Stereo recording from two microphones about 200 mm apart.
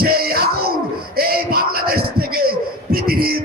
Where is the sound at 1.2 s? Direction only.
50° right (ahead or behind).